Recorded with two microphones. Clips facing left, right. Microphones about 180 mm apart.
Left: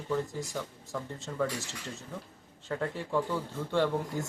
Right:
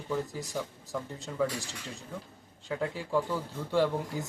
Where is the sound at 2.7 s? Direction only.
5° right (ahead or behind).